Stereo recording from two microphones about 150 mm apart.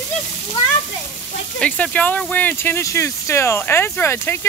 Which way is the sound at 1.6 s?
10° left (ahead or behind).